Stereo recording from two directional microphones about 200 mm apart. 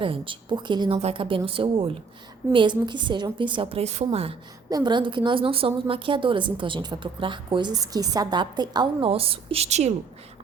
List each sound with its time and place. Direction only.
0.0 s a woman's voice: 25° right (ahead or behind)